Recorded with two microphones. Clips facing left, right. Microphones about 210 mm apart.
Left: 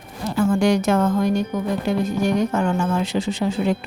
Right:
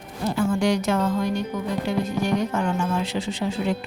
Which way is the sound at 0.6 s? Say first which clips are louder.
Left 5 dB; 50° left (ahead or behind).